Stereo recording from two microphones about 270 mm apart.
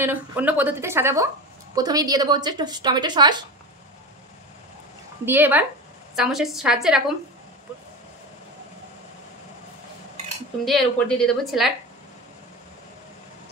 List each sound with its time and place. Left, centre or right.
0.0 s a woman's voice: centre
5.2 s a woman's voice: centre
10.6 s speech: centre